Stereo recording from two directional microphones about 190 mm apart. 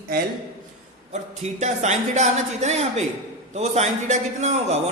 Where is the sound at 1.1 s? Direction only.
35° right (ahead or behind).